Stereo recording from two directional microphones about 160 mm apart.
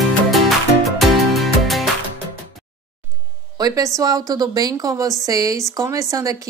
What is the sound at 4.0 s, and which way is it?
Speech, 20° right (ahead or behind).